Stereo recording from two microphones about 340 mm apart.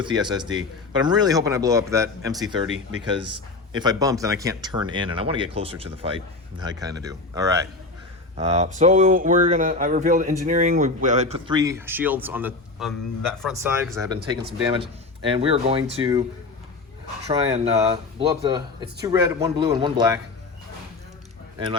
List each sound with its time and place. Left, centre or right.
0.0 s speech: centre
15.4 s speech: centre
17.2 s speech: centre